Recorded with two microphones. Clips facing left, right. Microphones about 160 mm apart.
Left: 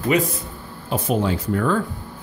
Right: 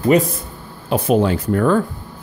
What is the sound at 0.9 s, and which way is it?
Speech, 70° right (ahead or behind).